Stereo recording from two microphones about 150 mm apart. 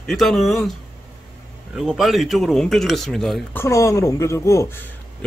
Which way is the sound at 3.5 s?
20° left (ahead or behind).